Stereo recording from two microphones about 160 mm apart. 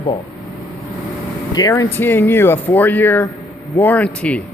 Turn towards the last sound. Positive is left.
turn(degrees=10)  # may be behind; listen again after turning